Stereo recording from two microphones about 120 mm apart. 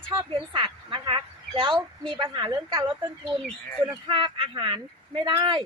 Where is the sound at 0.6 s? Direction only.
45° right (ahead or behind).